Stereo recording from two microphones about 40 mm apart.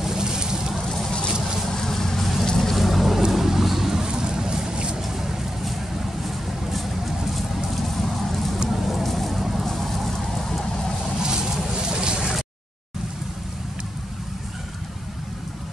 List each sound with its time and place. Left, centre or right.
0.0 s vehicle: centre
0.8 s vehicle: centre
2.4 s boat: centre
2.7 s boat: centre; by 5.0 s right
5.0 s vehicle: centre
7.3 s vehicle: centre
11.1 s vehicle: centre